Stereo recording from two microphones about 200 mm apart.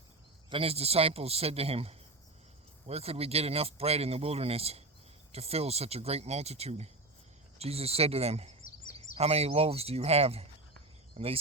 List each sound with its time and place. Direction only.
0.5 s a man's voice: 30° right (ahead or behind)